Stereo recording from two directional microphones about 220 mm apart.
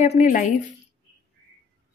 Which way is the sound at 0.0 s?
35° left (ahead or behind).